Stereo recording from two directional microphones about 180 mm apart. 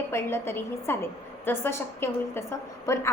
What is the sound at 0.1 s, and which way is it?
A woman's voice, 15° left (ahead or behind).